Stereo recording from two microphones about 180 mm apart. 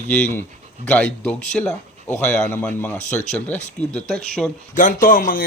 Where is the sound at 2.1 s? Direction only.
40° left (ahead or behind).